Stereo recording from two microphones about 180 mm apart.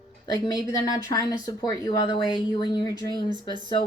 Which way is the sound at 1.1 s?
20° left (ahead or behind).